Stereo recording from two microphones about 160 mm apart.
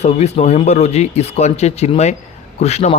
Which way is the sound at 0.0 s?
40° left (ahead or behind).